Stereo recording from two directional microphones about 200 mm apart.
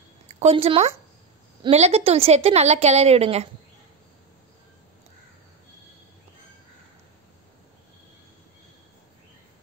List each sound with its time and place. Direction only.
0.3 s a woman's voice: 30° right (ahead or behind)